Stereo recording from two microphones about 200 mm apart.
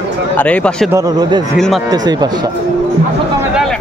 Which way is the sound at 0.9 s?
20° right (ahead or behind).